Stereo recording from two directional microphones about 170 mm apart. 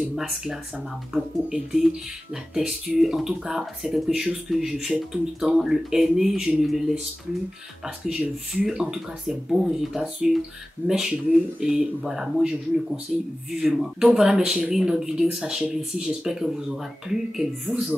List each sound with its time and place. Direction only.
0.1 s speech: centre (ahead or behind)
8.6 s speech: 5° right (ahead or behind)